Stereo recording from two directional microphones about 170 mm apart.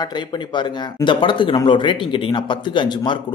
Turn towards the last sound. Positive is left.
turn(degrees=30)  # may be behind; listen again after turning